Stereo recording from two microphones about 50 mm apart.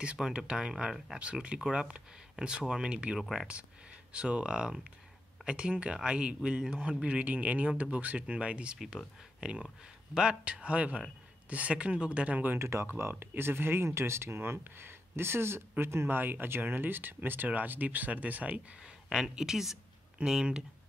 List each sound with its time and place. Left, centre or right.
0.2 s speech: centre
1.2 s a man's voice: right
3.2 s speech: centre
4.1 s a man's voice: right
12.5 s speech: right
12.9 s speech: right
16.2 s speech: right
19.0 s speech: centre